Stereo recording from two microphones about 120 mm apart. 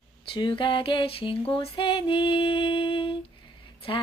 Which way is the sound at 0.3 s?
45° left (ahead or behind).